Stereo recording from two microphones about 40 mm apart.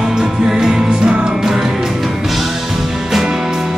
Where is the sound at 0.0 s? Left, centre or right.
Centre.